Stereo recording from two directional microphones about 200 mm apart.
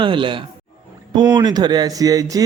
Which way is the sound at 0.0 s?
25° right (ahead or behind).